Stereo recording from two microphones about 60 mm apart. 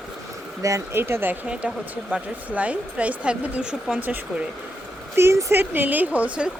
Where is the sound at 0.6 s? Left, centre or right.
Right.